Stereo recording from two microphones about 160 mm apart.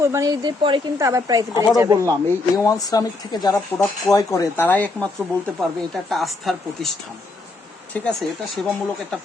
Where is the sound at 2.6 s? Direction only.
20° left (ahead or behind).